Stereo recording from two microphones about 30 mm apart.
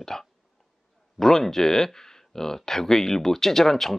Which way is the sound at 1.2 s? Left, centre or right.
Centre.